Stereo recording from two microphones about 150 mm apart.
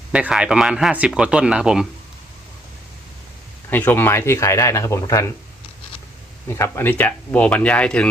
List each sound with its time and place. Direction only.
0.1 s speech: 5° right (ahead or behind)
3.7 s speech: 15° left (ahead or behind)
6.5 s speech: 15° left (ahead or behind)